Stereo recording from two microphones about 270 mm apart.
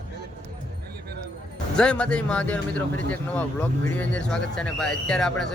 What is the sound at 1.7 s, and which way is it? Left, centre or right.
Speech, centre.